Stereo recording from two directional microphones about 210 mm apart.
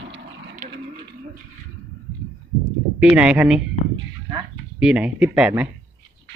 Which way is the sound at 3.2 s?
5° right (ahead or behind).